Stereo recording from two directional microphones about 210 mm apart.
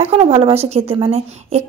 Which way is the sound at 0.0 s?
30° right (ahead or behind).